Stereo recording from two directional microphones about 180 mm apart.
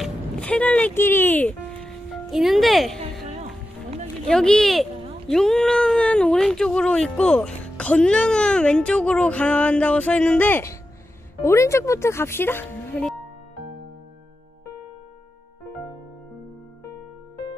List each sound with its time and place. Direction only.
0.0 s music: 5° left (ahead or behind)
2.3 s speech: centre (ahead or behind)
3.0 s music: 35° right (ahead or behind)
4.3 s speech: 5° left (ahead or behind)